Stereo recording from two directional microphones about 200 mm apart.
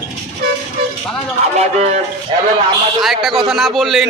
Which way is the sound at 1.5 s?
35° right (ahead or behind).